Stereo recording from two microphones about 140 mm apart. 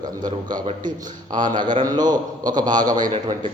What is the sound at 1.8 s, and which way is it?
A man's voice, 30° right (ahead or behind).